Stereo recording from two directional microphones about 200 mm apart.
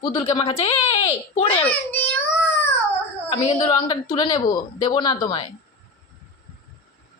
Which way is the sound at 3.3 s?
25° left (ahead or behind).